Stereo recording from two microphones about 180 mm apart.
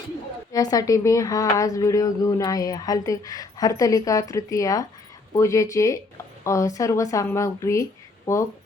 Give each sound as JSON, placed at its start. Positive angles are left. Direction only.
{"t": 0.5, "sound": "speech", "side_deg": 20}